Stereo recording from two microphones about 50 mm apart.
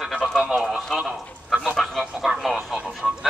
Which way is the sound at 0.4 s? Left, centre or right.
Centre.